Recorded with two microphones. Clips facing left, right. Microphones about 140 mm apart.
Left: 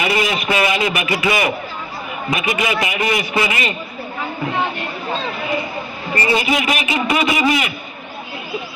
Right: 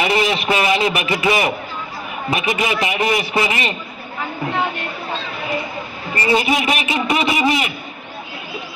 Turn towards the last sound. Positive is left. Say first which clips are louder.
# left 1 dB
turn(degrees=-30)  # may be behind; listen again after turning